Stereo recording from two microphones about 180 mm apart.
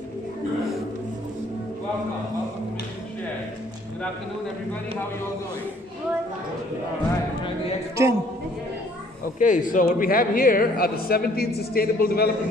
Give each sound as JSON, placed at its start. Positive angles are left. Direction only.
{"t": 7.9, "sound": "a man's voice", "side_deg": -15}
{"t": 9.4, "sound": "speech", "side_deg": 45}